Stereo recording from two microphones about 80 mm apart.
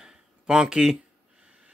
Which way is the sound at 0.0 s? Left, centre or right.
Centre.